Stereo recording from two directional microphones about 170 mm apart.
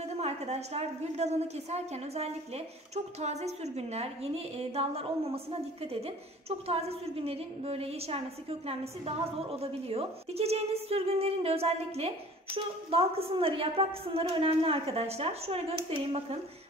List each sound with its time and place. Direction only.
0.2 s a woman's voice: 40° right (ahead or behind)